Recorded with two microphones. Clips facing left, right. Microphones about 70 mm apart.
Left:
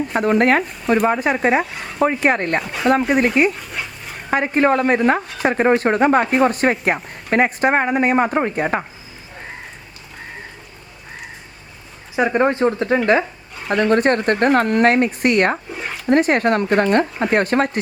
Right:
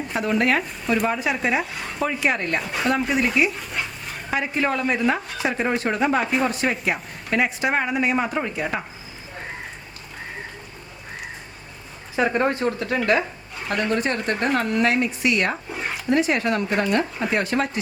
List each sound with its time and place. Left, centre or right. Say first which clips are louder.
0.1 s speech: left 5 dB; left
1.7 s speech: left 1 dB; centre
2.0 s speech: left 6 dB; left
3.5 s dog: even; centre
4.3 s speech: left 7 dB; left
12.1 s speech: left 4 dB; centre
13.9 s speech: left 10 dB; left
15.7 s speech: left 1 dB; centre
16.0 s speech: left 6 dB; left